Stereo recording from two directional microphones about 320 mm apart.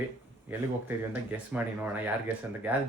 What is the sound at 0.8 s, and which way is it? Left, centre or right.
A woman's voice, centre.